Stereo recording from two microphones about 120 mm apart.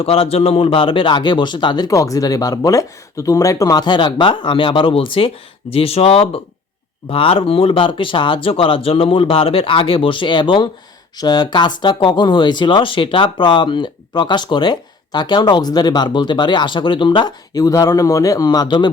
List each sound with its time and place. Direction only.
0.0 s speech: 55° left (ahead or behind); by 18.9 s 35° left (ahead or behind)